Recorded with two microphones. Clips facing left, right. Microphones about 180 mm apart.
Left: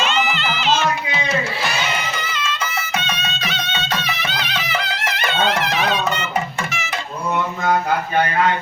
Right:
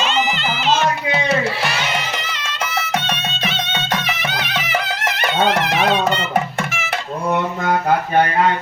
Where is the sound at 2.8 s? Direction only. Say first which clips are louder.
Right 3 dB; 65° right (ahead or behind).